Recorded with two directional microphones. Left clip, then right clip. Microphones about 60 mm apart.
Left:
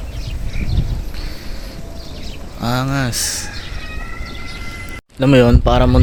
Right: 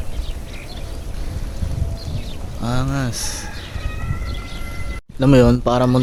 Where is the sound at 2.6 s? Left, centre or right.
Left.